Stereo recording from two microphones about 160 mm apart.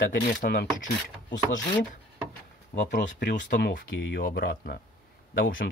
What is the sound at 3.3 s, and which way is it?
Speech, 55° left (ahead or behind).